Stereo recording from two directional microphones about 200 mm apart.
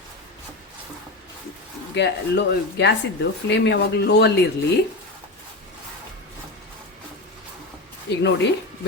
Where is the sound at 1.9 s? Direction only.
60° left (ahead or behind).